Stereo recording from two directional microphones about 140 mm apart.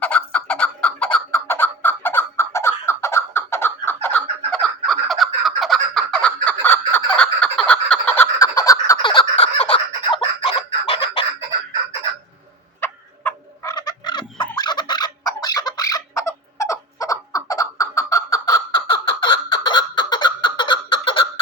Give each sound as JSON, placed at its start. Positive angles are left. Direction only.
{"t": 0.0, "sound": "fowl", "side_deg": 10}
{"t": 4.6, "sound": "turkey", "side_deg": 0}
{"t": 8.4, "sound": "a sound", "side_deg": 25}
{"t": 12.8, "sound": "turkey", "side_deg": 15}
{"t": 13.7, "sound": "fowl", "side_deg": 30}